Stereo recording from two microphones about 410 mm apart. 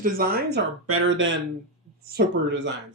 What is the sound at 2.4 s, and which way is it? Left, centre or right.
Speech, right.